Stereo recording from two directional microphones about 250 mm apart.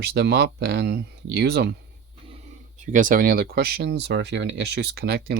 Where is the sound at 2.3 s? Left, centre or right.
Right.